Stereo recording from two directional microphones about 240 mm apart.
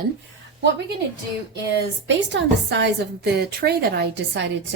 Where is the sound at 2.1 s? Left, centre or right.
Right.